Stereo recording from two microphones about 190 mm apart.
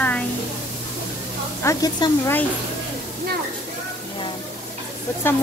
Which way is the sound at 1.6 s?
15° left (ahead or behind).